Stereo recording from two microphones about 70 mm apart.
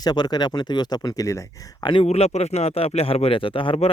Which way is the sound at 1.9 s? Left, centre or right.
Left.